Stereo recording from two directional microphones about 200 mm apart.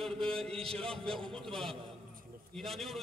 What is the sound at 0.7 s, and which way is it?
A man's voice, 5° left (ahead or behind).